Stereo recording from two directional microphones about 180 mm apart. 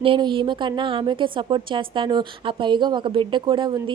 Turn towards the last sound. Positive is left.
turn(degrees=-25)  # may be behind; listen again after turning